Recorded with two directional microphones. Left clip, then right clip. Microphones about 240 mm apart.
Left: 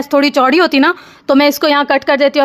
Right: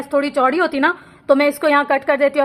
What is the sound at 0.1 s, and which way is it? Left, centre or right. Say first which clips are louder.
A woman's voice: left 6 dB; left.